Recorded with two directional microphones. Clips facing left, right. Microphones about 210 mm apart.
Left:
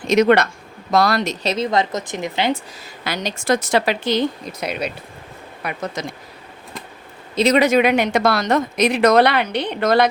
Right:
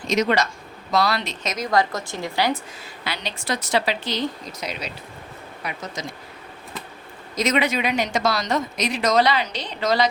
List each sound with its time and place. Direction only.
0.1 s speech: 60° left (ahead or behind)
0.9 s speech: 50° left (ahead or behind)
1.5 s a woman's voice: 25° left (ahead or behind)
3.0 s speech: 45° left (ahead or behind)
7.3 s speech: 35° left (ahead or behind); by 10.1 s 55° left (ahead or behind)